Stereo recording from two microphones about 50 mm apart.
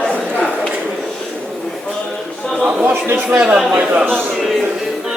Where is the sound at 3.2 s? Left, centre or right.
Right.